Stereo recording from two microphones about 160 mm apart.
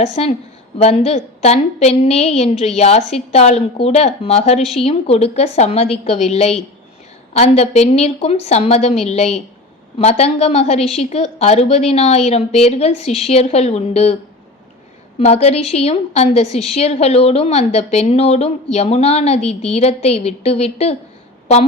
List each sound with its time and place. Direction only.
0.0 s a woman's voice: 40° left (ahead or behind)
15.2 s a woman's voice: 40° left (ahead or behind)